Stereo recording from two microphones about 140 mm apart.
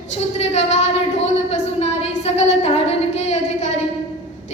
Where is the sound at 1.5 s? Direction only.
50° left (ahead or behind).